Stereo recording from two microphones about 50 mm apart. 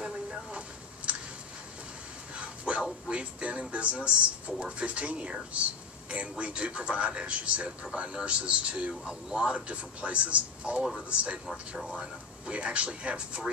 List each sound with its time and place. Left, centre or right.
0.0 s a sound: right
2.3 s dog: right
2.8 s speech: right
12.0 s speech: right